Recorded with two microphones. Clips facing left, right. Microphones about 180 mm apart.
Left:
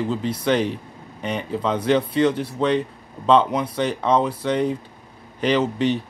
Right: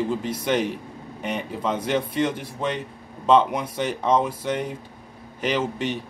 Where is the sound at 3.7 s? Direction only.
10° right (ahead or behind).